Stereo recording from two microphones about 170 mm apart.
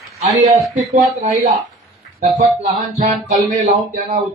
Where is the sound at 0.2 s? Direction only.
40° right (ahead or behind).